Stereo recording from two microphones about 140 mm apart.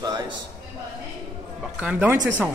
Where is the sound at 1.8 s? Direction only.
10° right (ahead or behind).